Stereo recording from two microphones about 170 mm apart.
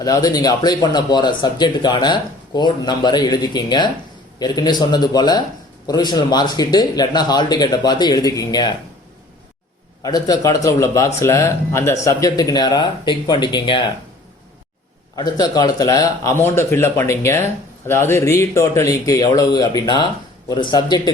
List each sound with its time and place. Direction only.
0.0 s speech: 20° left (ahead or behind)
10.0 s speech: 20° left (ahead or behind)
15.1 s a man's voice: 25° left (ahead or behind)